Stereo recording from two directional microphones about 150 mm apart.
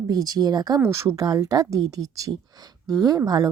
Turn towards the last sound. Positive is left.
turn(degrees=-25)  # may be behind; listen again after turning